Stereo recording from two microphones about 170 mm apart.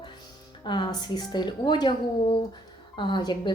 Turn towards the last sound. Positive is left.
turn(degrees=25)  # may be behind; listen again after turning